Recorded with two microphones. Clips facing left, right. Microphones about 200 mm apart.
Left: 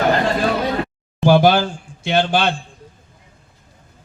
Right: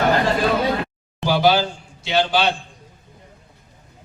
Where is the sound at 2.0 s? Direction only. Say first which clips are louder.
Left 2 dB; 50° left (ahead or behind).